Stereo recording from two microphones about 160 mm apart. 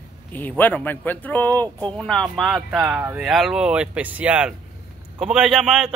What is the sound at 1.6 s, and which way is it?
Speech, 25° right (ahead or behind).